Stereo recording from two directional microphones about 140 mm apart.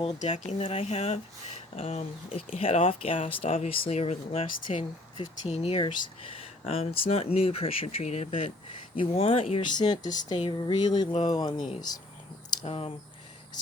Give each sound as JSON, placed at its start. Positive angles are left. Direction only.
{"t": 0.2, "sound": "speech", "side_deg": 60}
{"t": 0.6, "sound": "speech", "side_deg": 45}
{"t": 5.2, "sound": "speech", "side_deg": 50}
{"t": 12.6, "sound": "speech", "side_deg": 45}